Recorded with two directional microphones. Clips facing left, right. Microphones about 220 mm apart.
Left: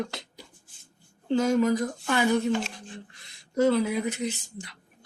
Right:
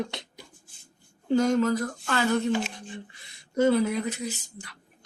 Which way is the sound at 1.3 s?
5° left (ahead or behind).